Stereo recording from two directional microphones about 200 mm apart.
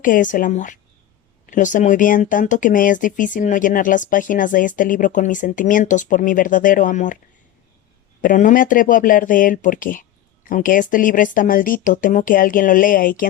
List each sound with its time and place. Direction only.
0.0 s speech: 40° left (ahead or behind)
8.2 s speech: 40° left (ahead or behind)